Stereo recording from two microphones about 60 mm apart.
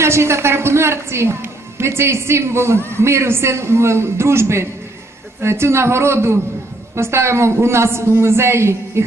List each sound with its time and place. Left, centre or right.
0.0 s a woman's voice: right